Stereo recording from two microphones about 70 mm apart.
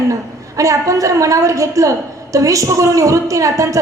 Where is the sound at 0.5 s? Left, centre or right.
Right.